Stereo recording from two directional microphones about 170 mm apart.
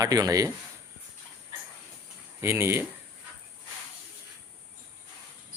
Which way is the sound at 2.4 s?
15° right (ahead or behind).